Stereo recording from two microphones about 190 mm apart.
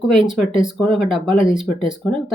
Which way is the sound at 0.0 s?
25° right (ahead or behind).